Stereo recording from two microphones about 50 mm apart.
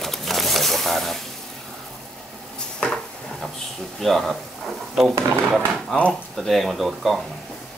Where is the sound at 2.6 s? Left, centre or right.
Centre.